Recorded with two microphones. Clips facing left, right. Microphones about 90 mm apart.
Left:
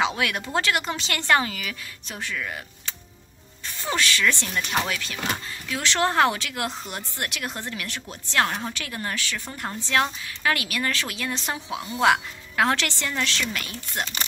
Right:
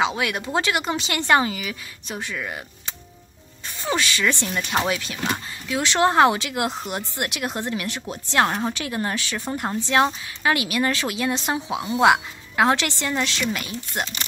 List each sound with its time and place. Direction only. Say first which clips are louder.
0.0 s speech: right 2 dB; 10° right (ahead or behind)
3.8 s speech: right 1 dB; 15° right (ahead or behind)